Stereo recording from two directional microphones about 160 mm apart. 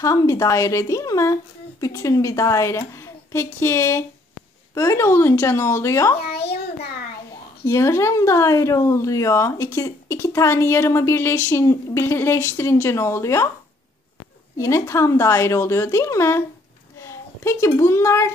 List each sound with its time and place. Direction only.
0.0 s a woman's voice: 20° left (ahead or behind)
6.3 s a sound: 90° left
7.6 s speech: 15° left (ahead or behind)
14.6 s a child's voice: 20° left (ahead or behind)